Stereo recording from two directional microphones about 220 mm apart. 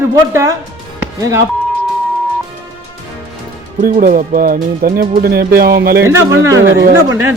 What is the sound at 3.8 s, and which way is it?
Speech, 40° right (ahead or behind).